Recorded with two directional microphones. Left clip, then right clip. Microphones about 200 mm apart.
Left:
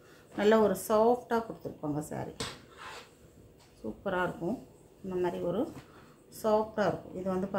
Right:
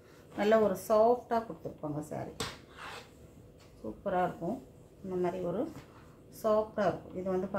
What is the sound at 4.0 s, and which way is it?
Speech, 45° left (ahead or behind).